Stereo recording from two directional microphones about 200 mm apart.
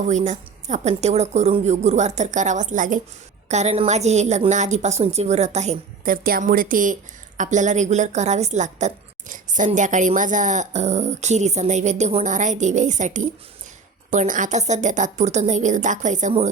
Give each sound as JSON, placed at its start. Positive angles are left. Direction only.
{"t": 0.1, "sound": "a woman's voice", "side_deg": -35}